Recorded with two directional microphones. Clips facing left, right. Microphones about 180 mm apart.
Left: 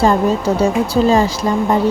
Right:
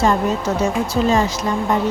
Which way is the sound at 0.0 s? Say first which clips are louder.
Left 4 dB; 35° left (ahead or behind).